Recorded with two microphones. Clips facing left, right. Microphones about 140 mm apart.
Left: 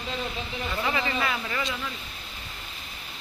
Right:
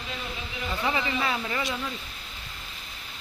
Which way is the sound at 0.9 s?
20° right (ahead or behind).